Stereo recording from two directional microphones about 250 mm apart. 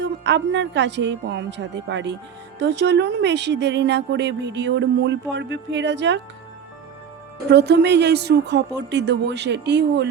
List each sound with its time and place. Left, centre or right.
0.0 s speech: right
7.5 s speech: right